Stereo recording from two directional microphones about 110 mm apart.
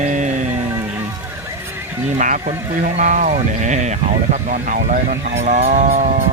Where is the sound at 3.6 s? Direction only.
90° right.